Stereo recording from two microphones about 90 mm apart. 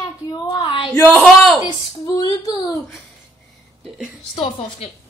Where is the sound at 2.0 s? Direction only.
45° left (ahead or behind).